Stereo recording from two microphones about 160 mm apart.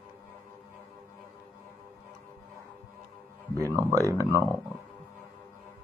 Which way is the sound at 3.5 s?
20° right (ahead or behind).